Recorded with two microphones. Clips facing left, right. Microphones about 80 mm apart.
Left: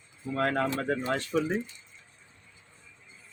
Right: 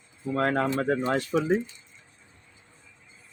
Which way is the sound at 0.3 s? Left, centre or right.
Centre.